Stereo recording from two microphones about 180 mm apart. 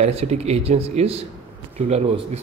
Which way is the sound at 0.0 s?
35° right (ahead or behind).